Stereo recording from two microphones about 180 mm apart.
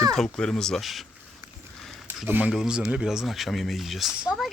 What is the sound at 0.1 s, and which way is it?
Speech, 5° left (ahead or behind).